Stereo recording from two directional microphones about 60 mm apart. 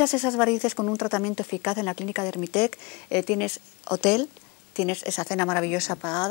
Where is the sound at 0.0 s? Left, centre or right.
Left.